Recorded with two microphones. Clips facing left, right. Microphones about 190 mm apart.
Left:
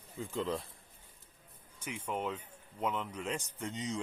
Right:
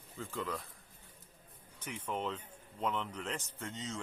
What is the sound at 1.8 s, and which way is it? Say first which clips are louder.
Speech: left 1 dB; 10° left (ahead or behind).